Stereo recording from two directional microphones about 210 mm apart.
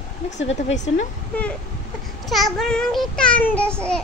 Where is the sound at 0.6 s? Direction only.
35° left (ahead or behind).